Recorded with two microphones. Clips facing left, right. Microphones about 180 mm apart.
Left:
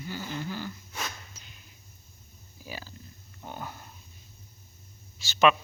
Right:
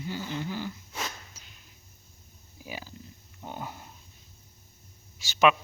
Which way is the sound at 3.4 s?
15° right (ahead or behind).